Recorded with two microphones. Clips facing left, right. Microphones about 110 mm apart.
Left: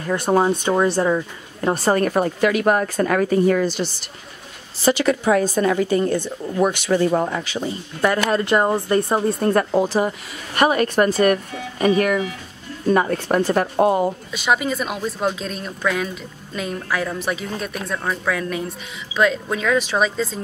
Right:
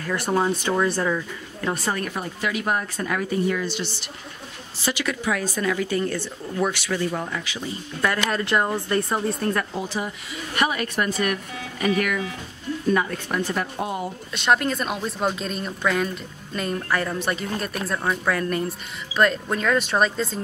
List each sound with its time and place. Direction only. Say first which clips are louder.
0.0 s a woman's voice: left 5 dB; 25° left (ahead or behind)
6.9 s speech: left 8 dB; 40° left (ahead or behind)
8.3 s speech: left 5 dB; 25° left (ahead or behind)
9.8 s a woman's voice: left 8 dB; 50° left (ahead or behind)
11.1 s a woman's voice: left 8 dB; 35° left (ahead or behind); by 14.1 s 55° left (ahead or behind)
14.3 s a woman's voice: right 4 dB; 5° left (ahead or behind)